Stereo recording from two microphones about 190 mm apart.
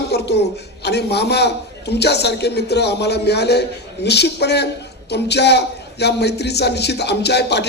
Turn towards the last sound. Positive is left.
turn(degrees=60)  # may be behind; listen again after turning